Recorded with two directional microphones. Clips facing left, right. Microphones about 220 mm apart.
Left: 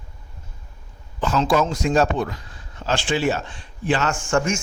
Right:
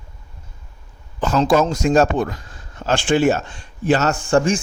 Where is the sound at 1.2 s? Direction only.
45° right (ahead or behind).